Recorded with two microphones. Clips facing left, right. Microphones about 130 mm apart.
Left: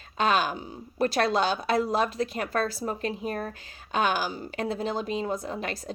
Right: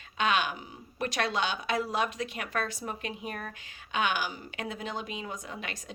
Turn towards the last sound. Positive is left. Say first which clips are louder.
# left 8 dB
turn(degrees=40)  # may be behind; listen again after turning